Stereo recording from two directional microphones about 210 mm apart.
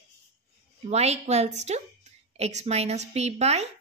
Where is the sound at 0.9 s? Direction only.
30° right (ahead or behind).